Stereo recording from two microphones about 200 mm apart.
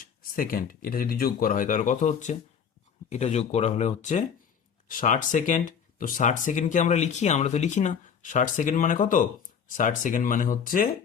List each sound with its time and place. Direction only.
0.0 s speech: 45° left (ahead or behind)